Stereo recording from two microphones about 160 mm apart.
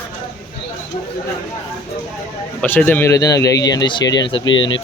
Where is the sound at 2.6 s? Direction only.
10° left (ahead or behind).